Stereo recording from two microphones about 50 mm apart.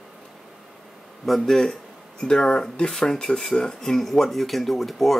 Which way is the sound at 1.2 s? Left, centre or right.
Centre.